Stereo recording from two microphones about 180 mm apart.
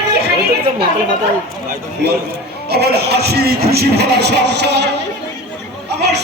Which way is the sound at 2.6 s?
65° right (ahead or behind).